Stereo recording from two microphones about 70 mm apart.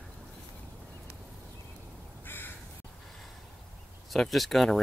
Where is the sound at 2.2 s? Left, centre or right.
Left.